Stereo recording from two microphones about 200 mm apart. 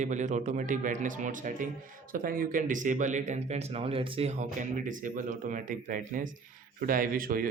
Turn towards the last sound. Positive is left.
turn(degrees=-45)  # may be behind; listen again after turning